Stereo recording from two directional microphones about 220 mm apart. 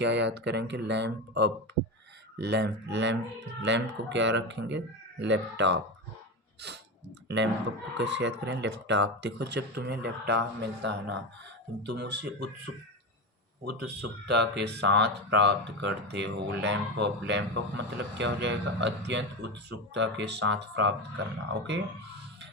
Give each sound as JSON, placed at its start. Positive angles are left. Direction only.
{"t": 0.0, "sound": "speech", "side_deg": -50}
{"t": 7.3, "sound": "speech", "side_deg": -55}
{"t": 13.8, "sound": "speech", "side_deg": -50}